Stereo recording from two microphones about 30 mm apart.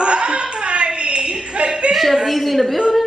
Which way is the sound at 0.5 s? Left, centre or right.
Right.